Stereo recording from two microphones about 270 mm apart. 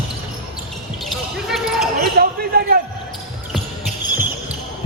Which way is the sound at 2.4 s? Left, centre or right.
Right.